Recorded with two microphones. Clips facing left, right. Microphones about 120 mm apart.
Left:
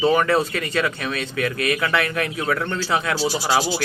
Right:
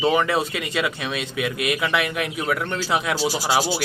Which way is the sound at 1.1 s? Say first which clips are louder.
Left 1 dB; 15° right (ahead or behind).